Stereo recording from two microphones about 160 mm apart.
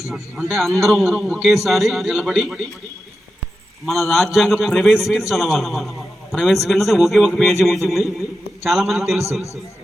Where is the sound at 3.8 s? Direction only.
Centre (ahead or behind).